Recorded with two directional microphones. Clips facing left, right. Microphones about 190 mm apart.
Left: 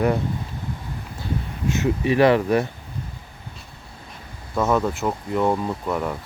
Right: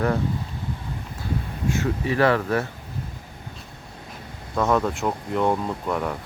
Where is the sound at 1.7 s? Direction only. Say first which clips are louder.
Left 4 dB; 20° left (ahead or behind).